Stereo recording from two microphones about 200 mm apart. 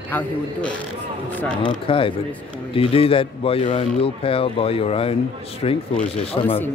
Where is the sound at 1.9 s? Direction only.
25° left (ahead or behind).